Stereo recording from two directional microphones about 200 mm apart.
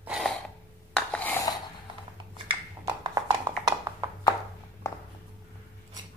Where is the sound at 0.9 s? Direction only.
5° left (ahead or behind).